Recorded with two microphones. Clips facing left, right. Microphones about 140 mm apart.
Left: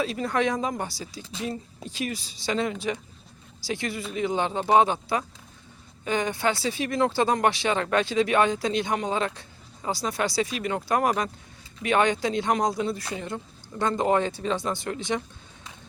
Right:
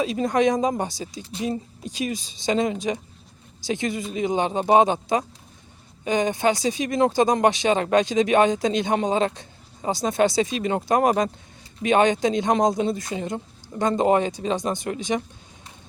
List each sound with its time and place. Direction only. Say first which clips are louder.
0.0 s speech: right 5 dB; 15° right (ahead or behind)